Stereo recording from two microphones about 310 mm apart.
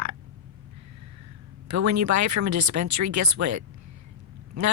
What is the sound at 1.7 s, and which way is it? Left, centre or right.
Speech, right.